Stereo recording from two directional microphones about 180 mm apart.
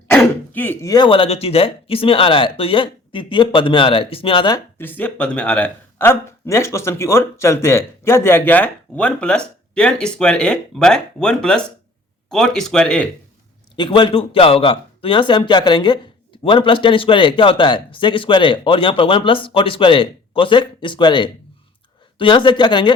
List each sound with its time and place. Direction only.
0.1 s speech: 10° left (ahead or behind); by 4.6 s 25° left (ahead or behind)
4.8 s speech: 10° left (ahead or behind)
13.7 s speech: 25° left (ahead or behind)